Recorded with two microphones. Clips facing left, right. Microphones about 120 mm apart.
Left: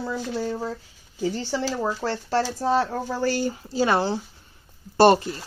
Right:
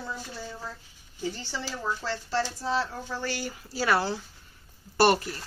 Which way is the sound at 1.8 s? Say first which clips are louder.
Left 6 dB; 50° left (ahead or behind).